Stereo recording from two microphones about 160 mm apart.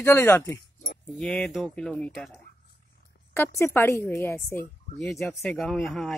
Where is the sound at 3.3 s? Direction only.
15° left (ahead or behind).